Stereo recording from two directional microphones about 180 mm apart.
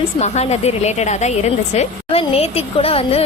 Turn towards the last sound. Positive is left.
turn(degrees=30)  # may be behind; listen again after turning